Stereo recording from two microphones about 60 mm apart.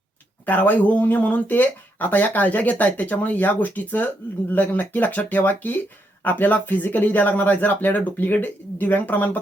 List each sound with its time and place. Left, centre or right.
0.4 s speech: left